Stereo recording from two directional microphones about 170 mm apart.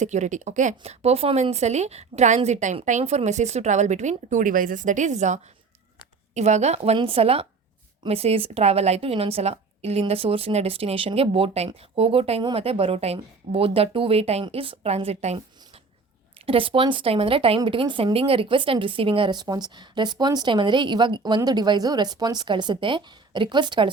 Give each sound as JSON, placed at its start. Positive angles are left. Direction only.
{"t": 0.0, "sound": "a woman's voice", "side_deg": -45}